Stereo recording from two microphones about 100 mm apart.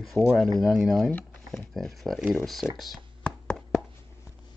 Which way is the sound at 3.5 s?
5° right (ahead or behind).